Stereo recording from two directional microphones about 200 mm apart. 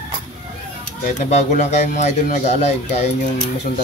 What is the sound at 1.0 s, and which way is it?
Speech, 35° left (ahead or behind).